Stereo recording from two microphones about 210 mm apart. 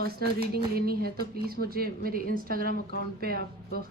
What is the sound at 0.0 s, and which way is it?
Speech, 45° right (ahead or behind).